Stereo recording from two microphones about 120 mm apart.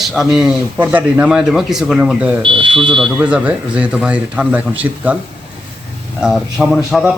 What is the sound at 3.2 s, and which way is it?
Speech, 10° right (ahead or behind).